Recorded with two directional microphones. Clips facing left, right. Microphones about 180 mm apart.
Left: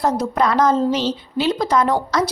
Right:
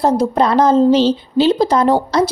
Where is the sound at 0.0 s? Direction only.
30° right (ahead or behind).